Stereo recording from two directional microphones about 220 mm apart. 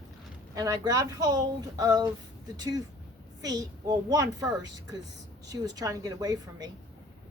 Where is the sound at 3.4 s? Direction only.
15° right (ahead or behind).